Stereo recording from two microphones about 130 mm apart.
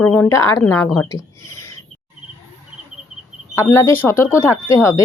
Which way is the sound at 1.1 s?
25° left (ahead or behind).